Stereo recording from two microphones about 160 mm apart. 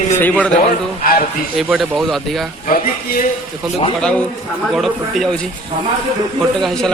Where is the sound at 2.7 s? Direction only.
60° left (ahead or behind).